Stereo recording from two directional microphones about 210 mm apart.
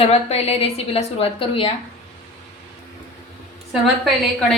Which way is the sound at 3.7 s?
Centre (ahead or behind).